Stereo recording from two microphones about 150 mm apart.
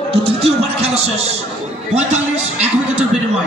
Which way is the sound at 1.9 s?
50° right (ahead or behind).